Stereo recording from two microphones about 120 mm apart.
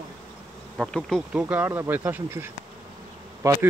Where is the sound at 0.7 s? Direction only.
5° left (ahead or behind).